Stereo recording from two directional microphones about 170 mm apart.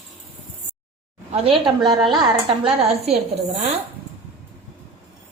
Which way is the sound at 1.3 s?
35° right (ahead or behind).